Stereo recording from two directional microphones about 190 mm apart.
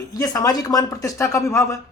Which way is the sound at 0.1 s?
20° left (ahead or behind).